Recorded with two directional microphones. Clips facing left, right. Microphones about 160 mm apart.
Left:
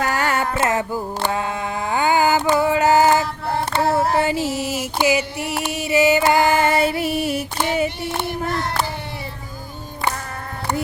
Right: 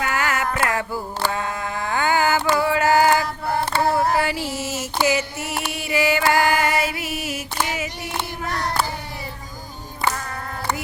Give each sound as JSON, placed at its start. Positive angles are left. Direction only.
{"t": 0.0, "sound": "carnatic music", "side_deg": 35}
{"t": 5.6, "sound": "female singing", "side_deg": 20}